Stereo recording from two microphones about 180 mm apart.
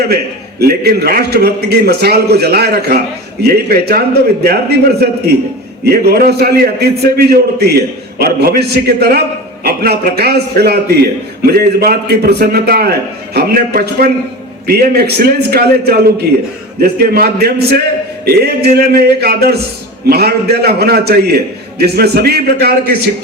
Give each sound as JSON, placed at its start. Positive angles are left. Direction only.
{"t": 0.6, "sound": "a man's voice", "side_deg": -60}